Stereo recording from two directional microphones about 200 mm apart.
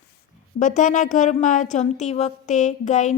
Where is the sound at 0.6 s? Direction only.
40° left (ahead or behind).